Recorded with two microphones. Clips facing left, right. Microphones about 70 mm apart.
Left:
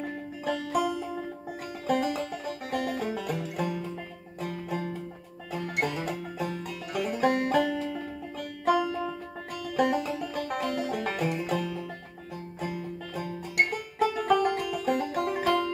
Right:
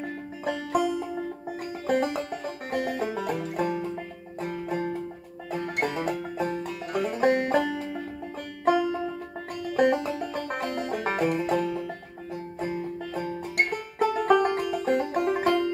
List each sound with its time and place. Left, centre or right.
1.9 s music: right
8.6 s banjo: right
9.8 s music: right